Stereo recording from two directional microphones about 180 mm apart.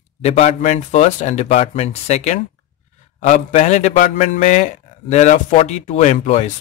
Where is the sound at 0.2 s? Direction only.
40° left (ahead or behind).